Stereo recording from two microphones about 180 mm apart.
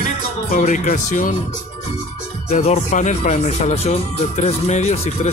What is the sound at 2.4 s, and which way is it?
Speech, 35° left (ahead or behind).